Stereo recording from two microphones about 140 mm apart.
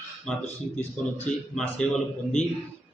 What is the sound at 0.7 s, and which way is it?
Speech, 55° left (ahead or behind).